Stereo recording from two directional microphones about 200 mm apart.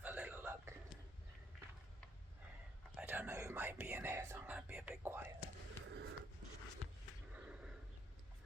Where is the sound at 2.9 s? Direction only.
5° right (ahead or behind).